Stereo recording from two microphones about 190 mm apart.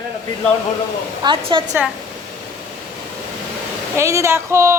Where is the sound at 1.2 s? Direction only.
25° right (ahead or behind).